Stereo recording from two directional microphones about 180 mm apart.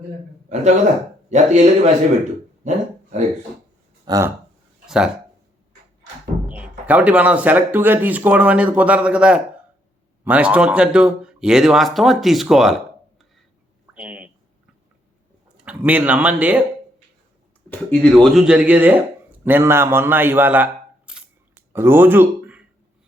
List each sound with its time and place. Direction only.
1.3 s speech: 40° right (ahead or behind)
2.6 s a sound: 45° right (ahead or behind)
4.0 s speech: 20° right (ahead or behind)
4.9 s speech: 5° right (ahead or behind)
6.4 s speech: 5° right (ahead or behind)
13.9 s a sound: 5° right (ahead or behind)
15.6 s speech: 5° right (ahead or behind)
17.7 s speech: 5° left (ahead or behind)
21.1 s camera: 10° right (ahead or behind)